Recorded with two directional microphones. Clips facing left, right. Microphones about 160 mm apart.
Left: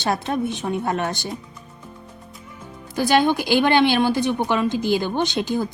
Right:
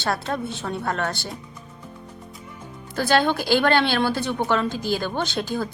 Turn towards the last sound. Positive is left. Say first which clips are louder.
# left 4 dB
turn(degrees=15)  # may be behind; listen again after turning